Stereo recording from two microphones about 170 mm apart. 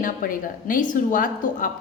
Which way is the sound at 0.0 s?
55° left (ahead or behind).